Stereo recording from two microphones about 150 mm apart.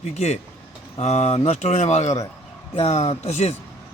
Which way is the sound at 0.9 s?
45° left (ahead or behind).